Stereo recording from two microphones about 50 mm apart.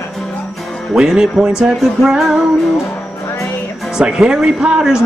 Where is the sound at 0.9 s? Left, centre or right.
Centre.